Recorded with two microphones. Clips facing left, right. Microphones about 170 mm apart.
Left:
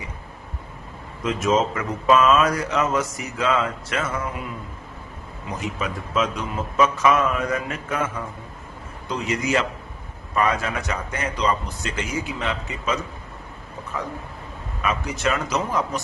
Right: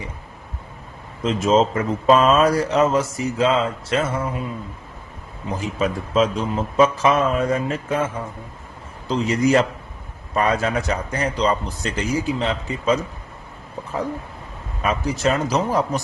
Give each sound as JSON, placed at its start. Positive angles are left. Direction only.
{"t": 1.2, "sound": "speech", "side_deg": -30}
{"t": 5.5, "sound": "a man's voice", "side_deg": -30}
{"t": 14.8, "sound": "a man's voice", "side_deg": -35}